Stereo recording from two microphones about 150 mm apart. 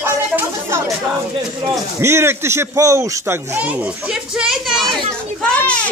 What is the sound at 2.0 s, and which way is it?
A man's voice, 15° right (ahead or behind).